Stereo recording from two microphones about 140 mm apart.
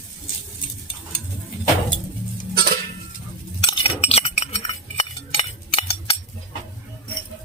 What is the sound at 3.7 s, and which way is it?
Chink, 40° left (ahead or behind).